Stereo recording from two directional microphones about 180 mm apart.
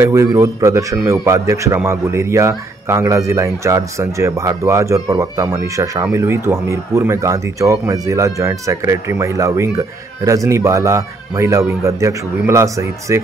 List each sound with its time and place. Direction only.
0.0 s speech: 15° right (ahead or behind)